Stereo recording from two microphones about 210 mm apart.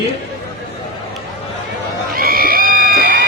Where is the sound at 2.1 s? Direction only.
45° right (ahead or behind).